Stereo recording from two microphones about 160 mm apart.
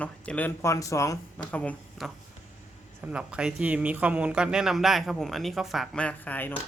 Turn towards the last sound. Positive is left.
turn(degrees=10)  # may be behind; listen again after turning